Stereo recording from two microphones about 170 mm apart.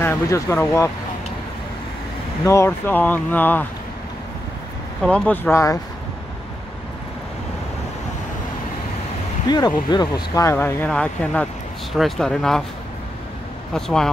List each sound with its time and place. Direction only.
0.0 s speech: 15° left (ahead or behind)
2.4 s speech: 15° left (ahead or behind)
5.0 s speech: 5° left (ahead or behind)
9.5 s speech: 25° left (ahead or behind); by 12.6 s 5° left (ahead or behind)
13.7 s speech: 5° left (ahead or behind)